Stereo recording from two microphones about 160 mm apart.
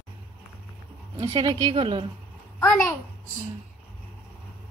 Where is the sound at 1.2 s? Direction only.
30° right (ahead or behind).